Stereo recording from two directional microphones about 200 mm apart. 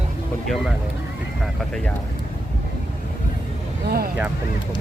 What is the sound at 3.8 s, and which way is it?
Speech, 50° right (ahead or behind).